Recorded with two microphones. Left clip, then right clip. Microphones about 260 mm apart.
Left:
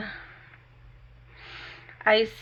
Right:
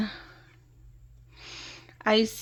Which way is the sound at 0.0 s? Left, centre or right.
Right.